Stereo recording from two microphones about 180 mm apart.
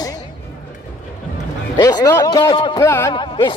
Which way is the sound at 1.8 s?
20° left (ahead or behind).